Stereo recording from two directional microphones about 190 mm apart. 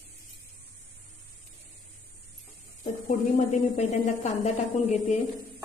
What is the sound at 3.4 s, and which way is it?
A woman's voice, 40° left (ahead or behind).